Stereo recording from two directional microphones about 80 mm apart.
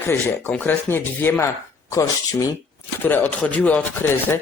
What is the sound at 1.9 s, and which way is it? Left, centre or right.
Speech, left.